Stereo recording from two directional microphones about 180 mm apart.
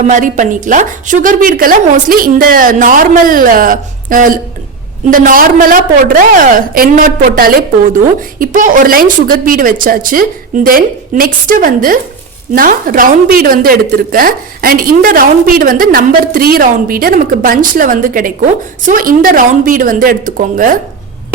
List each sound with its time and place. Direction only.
0.1 s a woman's voice: 45° right (ahead or behind)